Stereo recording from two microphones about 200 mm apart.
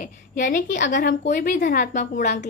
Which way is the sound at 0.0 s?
40° left (ahead or behind).